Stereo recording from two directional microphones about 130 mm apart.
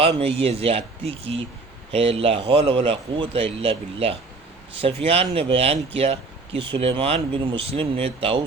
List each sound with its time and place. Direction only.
0.2 s speech: 50° right (ahead or behind)